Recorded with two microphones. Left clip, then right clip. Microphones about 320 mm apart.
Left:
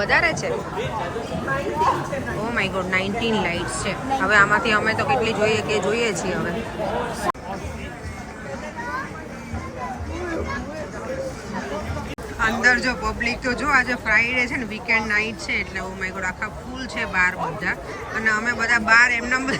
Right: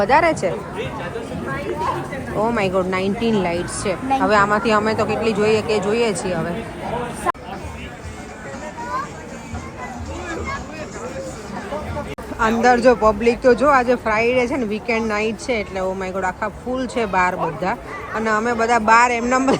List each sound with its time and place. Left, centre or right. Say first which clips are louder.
0.0 s speech: right 4 dB; centre
2.4 s speech: right 7 dB; centre
12.4 s speech: right 3 dB; centre